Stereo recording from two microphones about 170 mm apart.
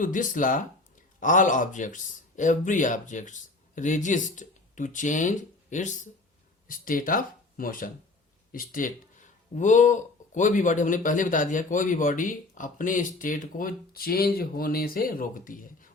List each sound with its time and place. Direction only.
0.0 s speech: 50° left (ahead or behind)